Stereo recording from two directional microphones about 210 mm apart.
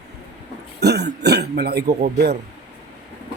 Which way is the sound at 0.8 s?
50° right (ahead or behind).